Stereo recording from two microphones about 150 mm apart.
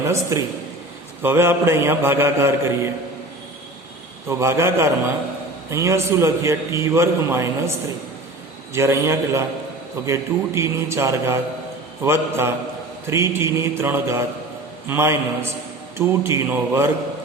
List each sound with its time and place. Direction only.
0.0 s a man's voice: 20° right (ahead or behind)
1.2 s mantra: 15° right (ahead or behind)
4.3 s mantra: 20° right (ahead or behind)
5.7 s a man's voice: 20° right (ahead or behind)
8.7 s a man's voice: 20° right (ahead or behind)
12.0 s mantra: 15° right (ahead or behind)